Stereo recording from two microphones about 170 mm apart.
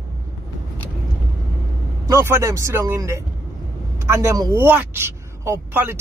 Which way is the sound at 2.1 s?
15° right (ahead or behind).